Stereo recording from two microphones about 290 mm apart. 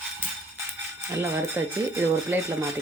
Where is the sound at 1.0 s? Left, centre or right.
Centre.